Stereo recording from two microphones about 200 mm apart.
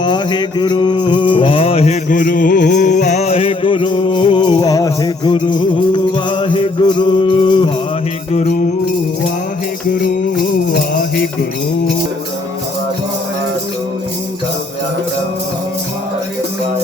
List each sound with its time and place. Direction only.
0.0 s music: 20° left (ahead or behind)
8.3 s music: 35° left (ahead or behind)